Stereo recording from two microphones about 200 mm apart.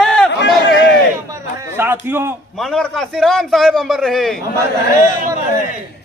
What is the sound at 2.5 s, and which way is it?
A man's voice, centre (ahead or behind).